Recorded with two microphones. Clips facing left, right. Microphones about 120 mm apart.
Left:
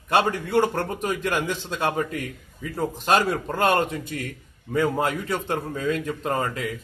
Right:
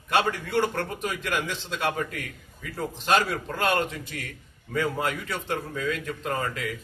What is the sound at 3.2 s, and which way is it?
Speech, 25° left (ahead or behind).